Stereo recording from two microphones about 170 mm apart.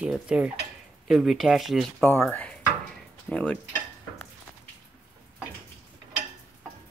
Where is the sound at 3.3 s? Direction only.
5° left (ahead or behind).